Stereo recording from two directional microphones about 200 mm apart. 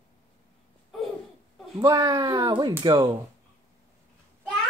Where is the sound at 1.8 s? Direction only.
20° right (ahead or behind).